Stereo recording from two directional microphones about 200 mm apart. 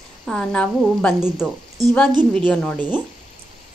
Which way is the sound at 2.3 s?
5° left (ahead or behind).